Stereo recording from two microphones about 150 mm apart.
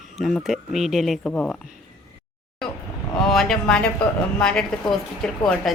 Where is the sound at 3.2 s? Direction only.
5° left (ahead or behind).